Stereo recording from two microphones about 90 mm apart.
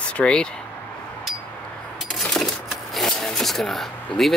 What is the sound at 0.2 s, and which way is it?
Speech, 10° left (ahead or behind).